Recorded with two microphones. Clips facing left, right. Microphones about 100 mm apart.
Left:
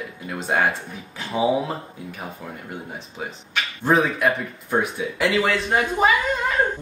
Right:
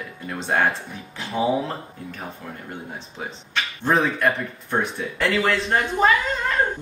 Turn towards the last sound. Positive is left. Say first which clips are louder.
# even
turn(degrees=5)  # may be behind; listen again after turning